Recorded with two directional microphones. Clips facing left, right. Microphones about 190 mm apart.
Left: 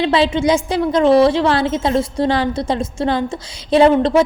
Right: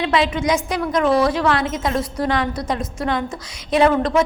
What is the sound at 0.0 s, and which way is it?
A woman's voice, 30° left (ahead or behind).